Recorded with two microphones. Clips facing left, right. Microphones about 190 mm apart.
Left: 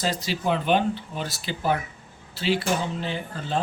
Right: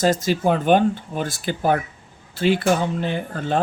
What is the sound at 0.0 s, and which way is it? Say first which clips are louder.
A man's voice: right 8 dB; 45° right (ahead or behind).